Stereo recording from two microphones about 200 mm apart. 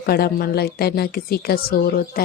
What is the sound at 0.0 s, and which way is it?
Speech, 50° left (ahead or behind).